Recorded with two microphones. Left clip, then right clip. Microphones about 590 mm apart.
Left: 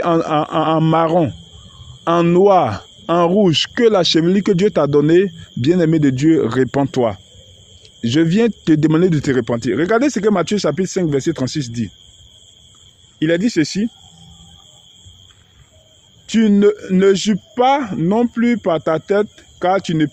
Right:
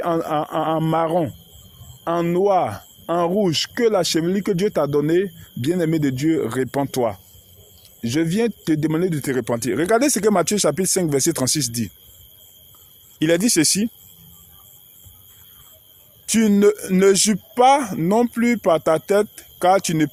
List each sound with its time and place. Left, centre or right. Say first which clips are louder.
0.0 s a man's voice: left 5 dB; right
13.1 s a man's voice: left 2 dB; right
16.2 s a man's voice: left 2 dB; right